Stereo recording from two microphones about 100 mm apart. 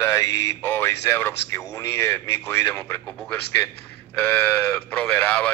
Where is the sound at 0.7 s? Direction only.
20° left (ahead or behind).